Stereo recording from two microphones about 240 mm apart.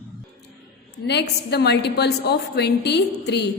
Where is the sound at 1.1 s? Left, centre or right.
Left.